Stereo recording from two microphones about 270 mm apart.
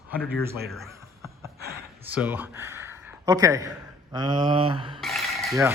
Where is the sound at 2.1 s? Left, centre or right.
Centre.